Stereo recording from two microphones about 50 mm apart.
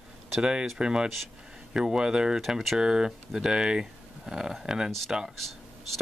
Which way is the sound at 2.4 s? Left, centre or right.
Centre.